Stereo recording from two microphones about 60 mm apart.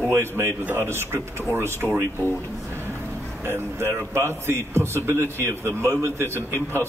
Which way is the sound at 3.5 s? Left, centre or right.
Right.